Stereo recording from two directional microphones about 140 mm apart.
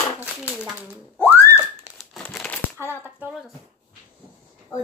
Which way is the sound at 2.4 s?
15° left (ahead or behind).